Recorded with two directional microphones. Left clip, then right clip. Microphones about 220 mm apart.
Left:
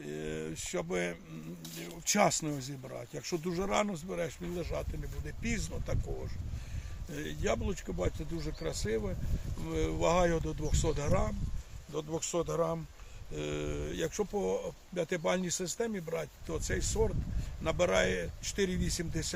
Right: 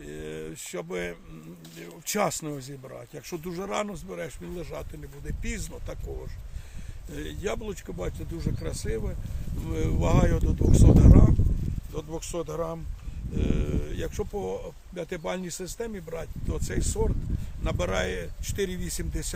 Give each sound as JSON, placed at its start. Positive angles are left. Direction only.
{"t": 0.0, "sound": "a sound", "side_deg": -15}
{"t": 1.8, "sound": "speech", "side_deg": -25}
{"t": 3.2, "sound": "speech", "side_deg": -10}
{"t": 7.1, "sound": "speech", "side_deg": -20}